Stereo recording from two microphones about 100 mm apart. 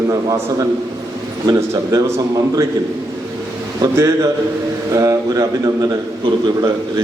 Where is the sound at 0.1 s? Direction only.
35° right (ahead or behind).